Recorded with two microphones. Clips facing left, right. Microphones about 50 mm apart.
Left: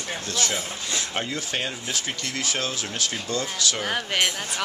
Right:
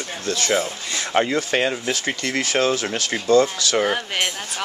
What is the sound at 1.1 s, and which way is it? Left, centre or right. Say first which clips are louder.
Speech: right 14 dB; right.